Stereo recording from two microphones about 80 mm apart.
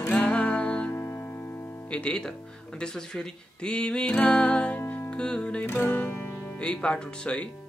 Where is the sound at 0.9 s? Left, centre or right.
Left.